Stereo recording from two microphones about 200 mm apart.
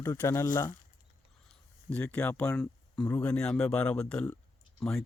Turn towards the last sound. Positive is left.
turn(degrees=0)  # may be behind; listen again after turning